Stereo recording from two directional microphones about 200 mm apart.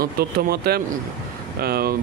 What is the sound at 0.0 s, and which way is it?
Speech, 50° right (ahead or behind).